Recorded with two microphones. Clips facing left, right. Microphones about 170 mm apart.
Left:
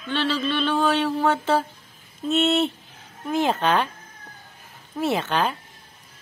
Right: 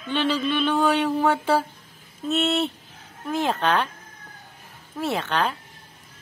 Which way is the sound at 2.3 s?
Centre (ahead or behind).